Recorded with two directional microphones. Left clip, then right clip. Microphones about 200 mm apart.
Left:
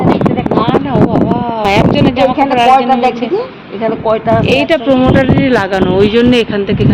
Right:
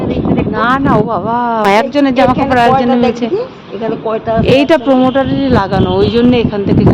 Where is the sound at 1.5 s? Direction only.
40° right (ahead or behind).